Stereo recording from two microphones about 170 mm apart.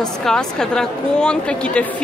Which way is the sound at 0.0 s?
5° left (ahead or behind).